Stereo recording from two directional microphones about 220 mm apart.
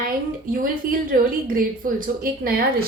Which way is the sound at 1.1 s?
40° right (ahead or behind).